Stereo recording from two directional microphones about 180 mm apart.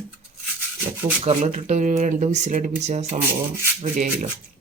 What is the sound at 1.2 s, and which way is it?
Speech, 40° right (ahead or behind).